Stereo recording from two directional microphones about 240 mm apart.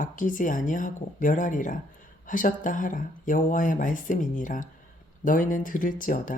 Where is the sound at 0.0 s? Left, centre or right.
Left.